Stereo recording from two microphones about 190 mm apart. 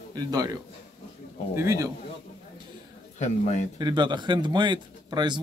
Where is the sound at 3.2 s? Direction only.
35° left (ahead or behind).